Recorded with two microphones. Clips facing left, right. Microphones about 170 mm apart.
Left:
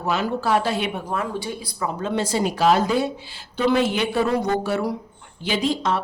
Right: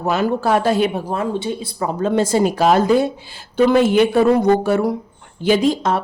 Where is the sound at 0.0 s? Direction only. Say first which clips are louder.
Right 5 dB; 45° right (ahead or behind).